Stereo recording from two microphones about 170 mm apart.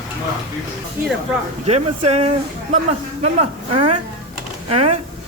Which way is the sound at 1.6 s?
35° right (ahead or behind).